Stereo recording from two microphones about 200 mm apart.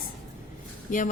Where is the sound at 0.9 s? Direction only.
40° left (ahead or behind).